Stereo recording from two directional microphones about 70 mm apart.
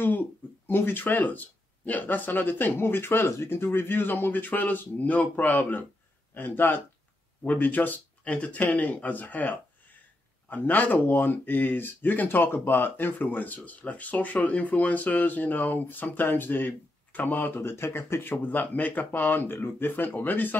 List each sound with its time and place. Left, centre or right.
0.0 s speech: left